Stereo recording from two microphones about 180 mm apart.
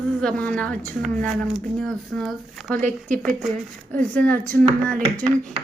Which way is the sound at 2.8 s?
45° right (ahead or behind).